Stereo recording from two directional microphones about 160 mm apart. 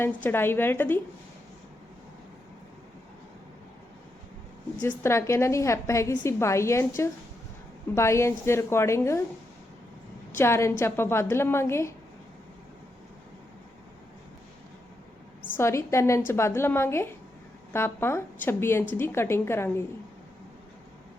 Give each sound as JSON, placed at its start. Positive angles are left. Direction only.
{"t": 0.0, "sound": "a woman's voice", "side_deg": 10}
{"t": 4.8, "sound": "a woman's voice", "side_deg": 15}
{"t": 10.3, "sound": "a woman's voice", "side_deg": 15}
{"t": 15.4, "sound": "a woman's voice", "side_deg": 15}